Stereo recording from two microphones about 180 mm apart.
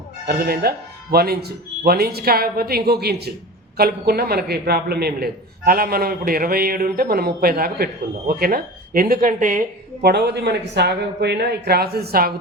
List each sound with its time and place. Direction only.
0.3 s a man's voice: 60° right (ahead or behind)